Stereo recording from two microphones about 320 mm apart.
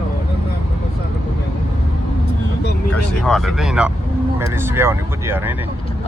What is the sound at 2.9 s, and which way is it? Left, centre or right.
Speech, centre.